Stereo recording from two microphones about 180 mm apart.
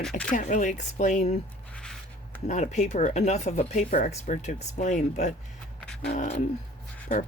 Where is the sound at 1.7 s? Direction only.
5° left (ahead or behind).